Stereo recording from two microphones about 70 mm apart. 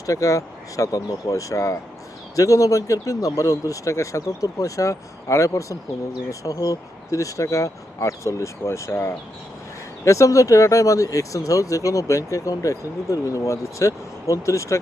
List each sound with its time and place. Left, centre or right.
0.0 s speech: left
6.4 s speech: left